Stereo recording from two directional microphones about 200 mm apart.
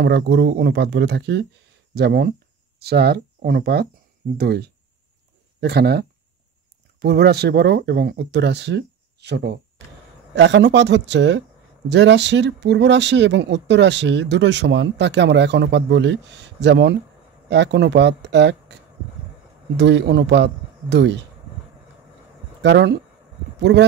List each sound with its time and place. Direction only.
0.0 s speech: 60° right (ahead or behind)
19.8 s speech: 60° right (ahead or behind)
22.6 s speech: 60° right (ahead or behind)